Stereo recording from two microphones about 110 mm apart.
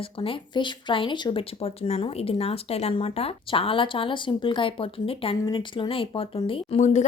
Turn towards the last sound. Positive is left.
turn(degrees=90)